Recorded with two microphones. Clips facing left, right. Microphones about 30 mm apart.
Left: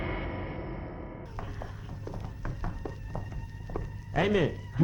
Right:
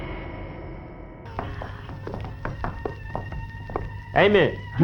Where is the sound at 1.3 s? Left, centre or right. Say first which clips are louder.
Right 8 dB; right.